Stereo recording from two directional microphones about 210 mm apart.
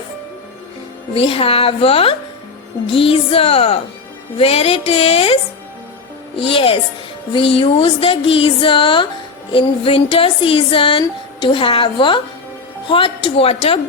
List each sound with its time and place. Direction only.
1.1 s speech: 25° left (ahead or behind)
6.4 s speech: 25° left (ahead or behind)